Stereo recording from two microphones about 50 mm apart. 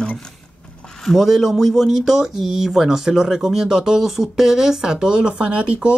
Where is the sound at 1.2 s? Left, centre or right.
Centre.